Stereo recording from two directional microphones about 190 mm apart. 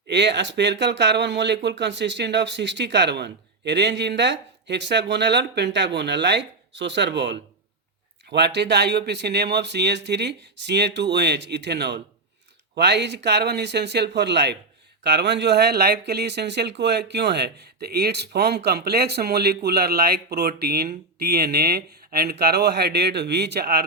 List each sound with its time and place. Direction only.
0.1 s speech: 65° right (ahead or behind)